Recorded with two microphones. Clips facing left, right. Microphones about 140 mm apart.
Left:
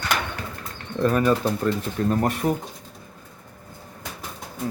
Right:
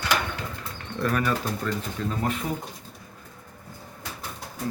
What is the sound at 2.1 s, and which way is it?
Speech, 55° left (ahead or behind).